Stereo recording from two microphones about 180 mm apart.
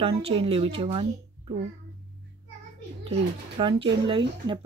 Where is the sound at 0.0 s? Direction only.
30° right (ahead or behind).